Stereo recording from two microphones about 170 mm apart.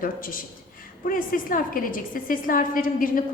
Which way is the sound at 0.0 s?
55° left (ahead or behind).